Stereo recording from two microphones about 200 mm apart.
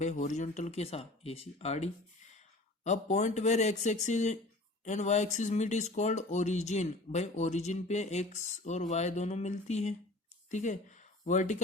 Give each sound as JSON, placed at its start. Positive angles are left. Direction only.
{"t": 0.0, "sound": "speech", "side_deg": 35}